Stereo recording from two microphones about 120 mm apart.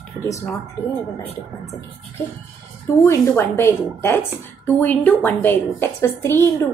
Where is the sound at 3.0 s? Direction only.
20° left (ahead or behind).